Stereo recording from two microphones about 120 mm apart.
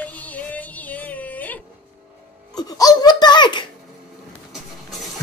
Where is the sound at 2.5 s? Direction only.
35° left (ahead or behind).